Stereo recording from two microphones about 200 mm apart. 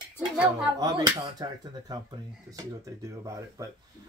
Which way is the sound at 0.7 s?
20° right (ahead or behind).